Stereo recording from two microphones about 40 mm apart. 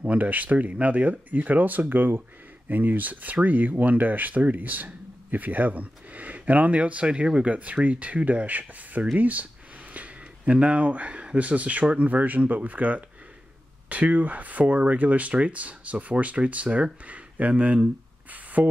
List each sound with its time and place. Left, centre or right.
0.0 s speech: right
2.7 s speech: right
7.4 s speech: right
9.9 s a sound: right
11.3 s speech: right
18.6 s a sound: right